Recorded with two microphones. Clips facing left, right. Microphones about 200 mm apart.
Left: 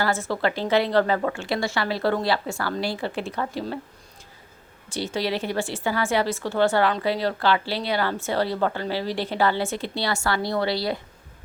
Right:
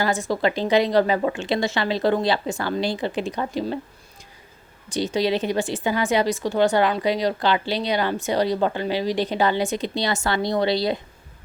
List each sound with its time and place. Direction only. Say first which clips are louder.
0.0 s speech: right 2 dB; 15° right (ahead or behind)
4.9 s speech: right 4 dB; 20° right (ahead or behind)